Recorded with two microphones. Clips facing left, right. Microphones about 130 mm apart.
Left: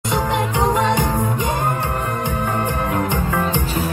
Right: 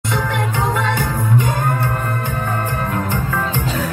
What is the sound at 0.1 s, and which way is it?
Music, 15° left (ahead or behind).